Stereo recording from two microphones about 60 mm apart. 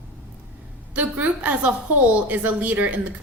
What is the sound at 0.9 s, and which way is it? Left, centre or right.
A woman's voice, right.